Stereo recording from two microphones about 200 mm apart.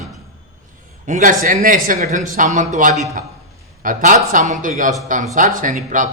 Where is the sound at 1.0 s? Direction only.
40° right (ahead or behind).